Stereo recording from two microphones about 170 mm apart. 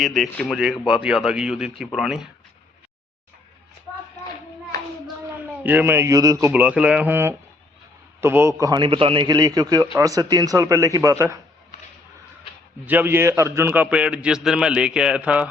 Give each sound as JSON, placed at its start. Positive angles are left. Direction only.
{"t": 0.0, "sound": "speech", "side_deg": 0}
{"t": 5.4, "sound": "a man's voice", "side_deg": -10}
{"t": 12.8, "sound": "a man's voice", "side_deg": -10}